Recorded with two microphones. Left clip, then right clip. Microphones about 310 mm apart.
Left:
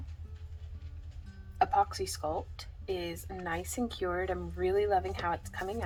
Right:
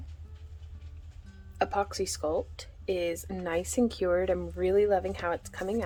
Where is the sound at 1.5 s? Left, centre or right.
Right.